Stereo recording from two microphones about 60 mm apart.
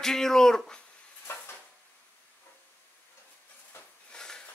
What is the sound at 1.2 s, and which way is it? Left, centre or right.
Dishes, left.